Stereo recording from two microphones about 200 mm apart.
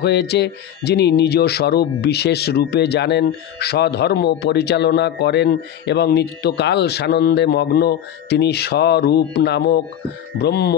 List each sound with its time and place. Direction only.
0.0 s speech: 55° left (ahead or behind)